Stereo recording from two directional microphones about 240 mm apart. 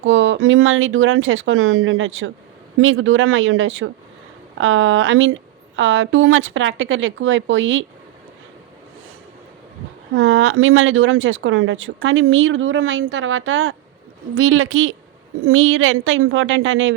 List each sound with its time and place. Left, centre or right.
0.0 s a woman's voice: right
10.2 s speech: right